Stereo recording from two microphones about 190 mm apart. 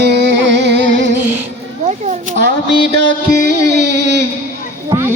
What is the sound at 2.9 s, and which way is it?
Music, 60° right (ahead or behind).